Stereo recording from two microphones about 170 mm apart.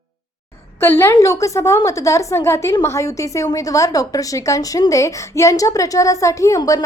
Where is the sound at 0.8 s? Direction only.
15° left (ahead or behind).